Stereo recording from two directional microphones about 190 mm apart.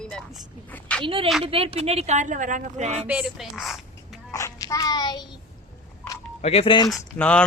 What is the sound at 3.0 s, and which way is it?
Speech, 5° right (ahead or behind).